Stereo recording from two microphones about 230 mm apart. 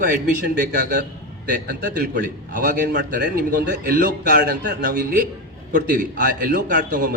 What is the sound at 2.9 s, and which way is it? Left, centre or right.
A man's voice, right.